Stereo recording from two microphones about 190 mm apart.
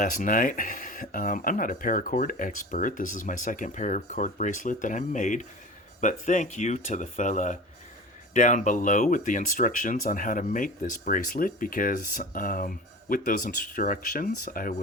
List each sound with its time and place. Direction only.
0.0 s speech: 45° left (ahead or behind)